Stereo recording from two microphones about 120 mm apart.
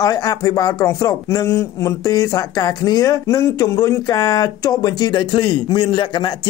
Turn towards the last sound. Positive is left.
turn(degrees=40)  # may be behind; listen again after turning